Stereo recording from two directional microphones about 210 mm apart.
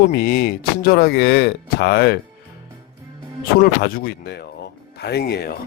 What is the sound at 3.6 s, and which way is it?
Speech, 50° left (ahead or behind).